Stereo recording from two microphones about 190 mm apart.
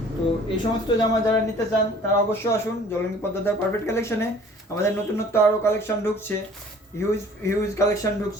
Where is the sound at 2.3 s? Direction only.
10° left (ahead or behind).